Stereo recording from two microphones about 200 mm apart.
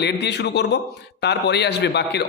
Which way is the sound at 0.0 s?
60° left (ahead or behind).